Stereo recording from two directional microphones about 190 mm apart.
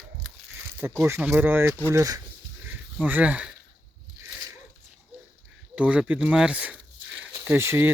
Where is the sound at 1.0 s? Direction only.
15° right (ahead or behind).